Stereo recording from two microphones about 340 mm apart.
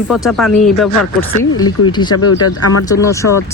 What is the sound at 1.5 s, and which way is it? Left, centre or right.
Speech, left.